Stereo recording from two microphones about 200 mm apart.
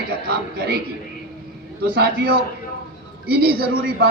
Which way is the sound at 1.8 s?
50° right (ahead or behind).